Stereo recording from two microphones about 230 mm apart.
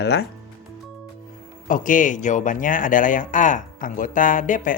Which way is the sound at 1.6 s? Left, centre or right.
Left.